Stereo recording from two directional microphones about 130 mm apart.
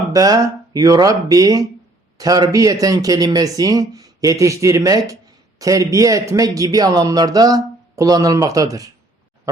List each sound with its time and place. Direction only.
0.1 s a man's voice: 25° right (ahead or behind)